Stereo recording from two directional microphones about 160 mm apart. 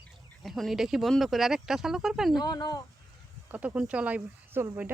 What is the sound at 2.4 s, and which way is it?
Speech, 25° left (ahead or behind).